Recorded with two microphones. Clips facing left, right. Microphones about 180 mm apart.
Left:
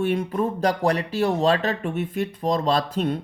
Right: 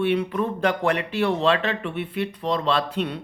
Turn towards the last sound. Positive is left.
turn(degrees=45)  # may be behind; listen again after turning